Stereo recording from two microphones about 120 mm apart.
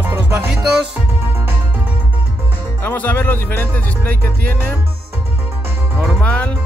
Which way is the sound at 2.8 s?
15° left (ahead or behind).